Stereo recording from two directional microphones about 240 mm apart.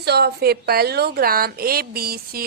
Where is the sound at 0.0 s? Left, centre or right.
Right.